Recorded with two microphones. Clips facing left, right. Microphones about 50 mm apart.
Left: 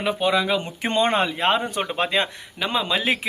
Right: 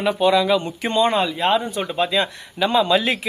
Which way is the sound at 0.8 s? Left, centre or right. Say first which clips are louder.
Right 2 dB; left.